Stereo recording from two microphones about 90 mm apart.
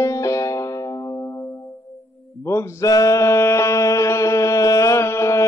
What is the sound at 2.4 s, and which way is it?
Music, 30° left (ahead or behind).